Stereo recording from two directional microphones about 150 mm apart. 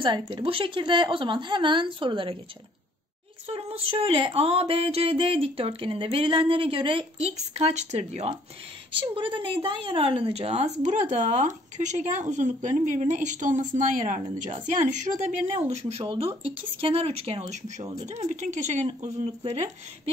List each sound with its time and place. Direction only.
0.0 s speech: 35° right (ahead or behind)
3.4 s speech: 40° right (ahead or behind)
9.0 s a woman's voice: 35° right (ahead or behind); by 15.0 s 55° right (ahead or behind)
15.7 s a woman's voice: 40° right (ahead or behind)